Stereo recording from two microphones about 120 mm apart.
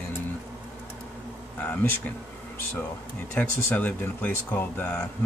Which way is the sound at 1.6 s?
15° left (ahead or behind).